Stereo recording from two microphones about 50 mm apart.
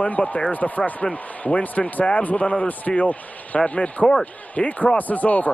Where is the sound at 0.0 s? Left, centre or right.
Left.